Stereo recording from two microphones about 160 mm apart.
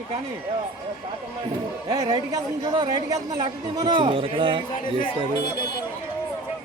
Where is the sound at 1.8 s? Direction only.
25° right (ahead or behind).